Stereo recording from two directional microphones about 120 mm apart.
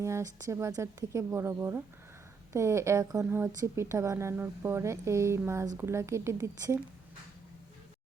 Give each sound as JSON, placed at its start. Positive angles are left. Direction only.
{"t": 0.0, "sound": "speech", "side_deg": -25}